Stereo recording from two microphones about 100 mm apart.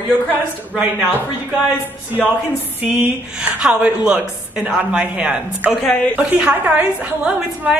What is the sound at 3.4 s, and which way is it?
A woman's voice, 10° right (ahead or behind).